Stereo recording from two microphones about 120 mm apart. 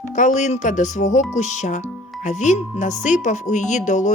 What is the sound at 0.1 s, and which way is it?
Speech, 90° left.